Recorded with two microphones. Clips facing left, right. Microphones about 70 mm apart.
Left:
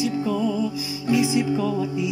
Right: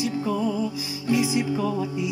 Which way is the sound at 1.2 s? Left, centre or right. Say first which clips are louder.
Left 3 dB; right.